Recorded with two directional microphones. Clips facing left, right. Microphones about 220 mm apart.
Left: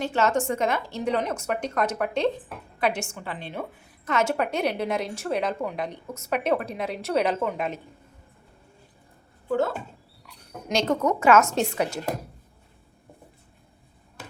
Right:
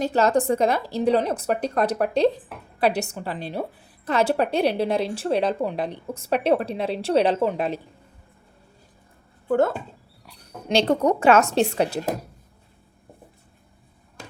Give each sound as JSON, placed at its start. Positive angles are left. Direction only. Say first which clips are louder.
{"t": 0.0, "sound": "a woman's voice", "louder": "right 4 dB", "side_deg": -35}
{"t": 9.5, "sound": "speech", "louder": "right 4 dB", "side_deg": -50}
{"t": 10.2, "sound": "a woman's voice", "louder": "right 4 dB", "side_deg": -30}